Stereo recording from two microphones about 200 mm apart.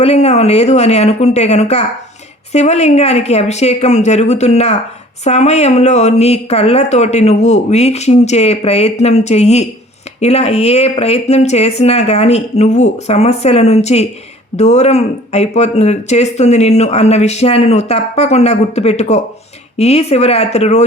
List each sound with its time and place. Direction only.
0.0 s speech: 30° left (ahead or behind)